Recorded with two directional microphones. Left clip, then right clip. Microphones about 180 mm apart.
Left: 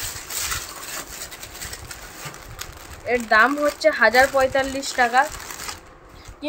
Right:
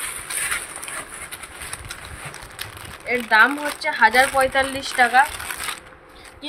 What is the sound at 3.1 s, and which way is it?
A woman's voice, 55° left (ahead or behind).